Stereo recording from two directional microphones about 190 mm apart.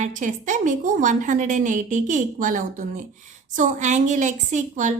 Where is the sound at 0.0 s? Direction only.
40° right (ahead or behind).